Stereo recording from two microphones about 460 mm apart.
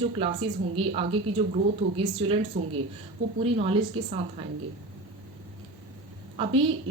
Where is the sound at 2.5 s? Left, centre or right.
Centre.